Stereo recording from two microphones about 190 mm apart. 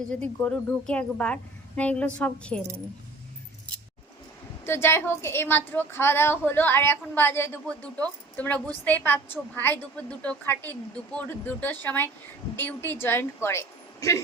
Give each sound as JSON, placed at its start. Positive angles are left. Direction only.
{"t": 0.1, "sound": "a woman's voice", "side_deg": 5}
{"t": 4.6, "sound": "a woman's voice", "side_deg": 15}